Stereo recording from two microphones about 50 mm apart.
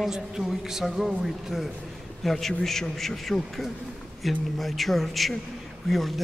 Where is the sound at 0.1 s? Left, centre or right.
Centre.